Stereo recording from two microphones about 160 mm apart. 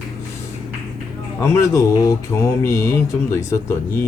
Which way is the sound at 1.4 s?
20° left (ahead or behind).